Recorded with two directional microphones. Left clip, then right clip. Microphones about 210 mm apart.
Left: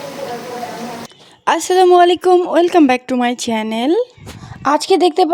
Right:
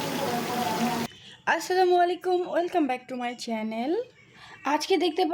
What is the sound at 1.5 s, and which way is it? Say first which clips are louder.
Speech: left 12 dB; 40° left (ahead or behind).